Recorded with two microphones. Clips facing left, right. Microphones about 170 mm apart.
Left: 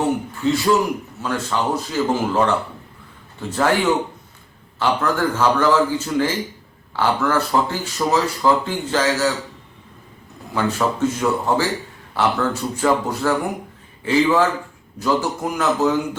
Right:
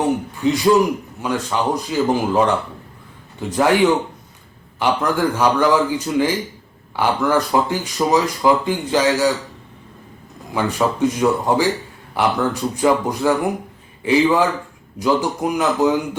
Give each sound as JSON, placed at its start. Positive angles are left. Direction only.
{"t": 0.0, "sound": "a sound", "side_deg": -15}
{"t": 1.2, "sound": "speech", "side_deg": -15}
{"t": 4.8, "sound": "speech", "side_deg": -15}
{"t": 10.5, "sound": "speech", "side_deg": -15}